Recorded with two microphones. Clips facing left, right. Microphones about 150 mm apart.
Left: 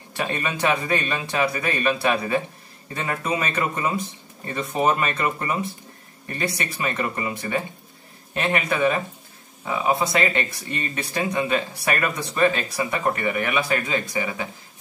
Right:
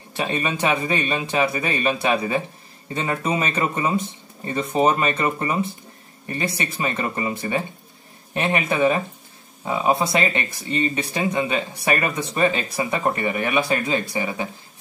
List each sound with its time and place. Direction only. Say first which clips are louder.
0.2 s speech: right 2 dB; 20° right (ahead or behind)